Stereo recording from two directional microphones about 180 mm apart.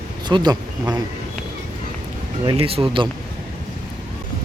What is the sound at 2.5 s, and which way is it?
Speech, 30° right (ahead or behind).